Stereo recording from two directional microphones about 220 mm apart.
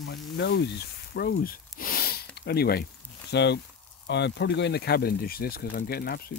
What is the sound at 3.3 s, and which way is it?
Speech, 50° left (ahead or behind).